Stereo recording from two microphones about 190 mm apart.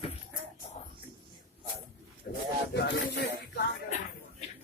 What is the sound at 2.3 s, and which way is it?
Speech, 55° left (ahead or behind).